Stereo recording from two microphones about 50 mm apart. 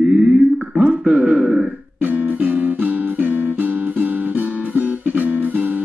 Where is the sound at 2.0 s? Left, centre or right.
Right.